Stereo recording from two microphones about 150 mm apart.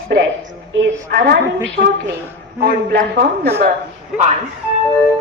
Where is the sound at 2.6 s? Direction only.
90° right.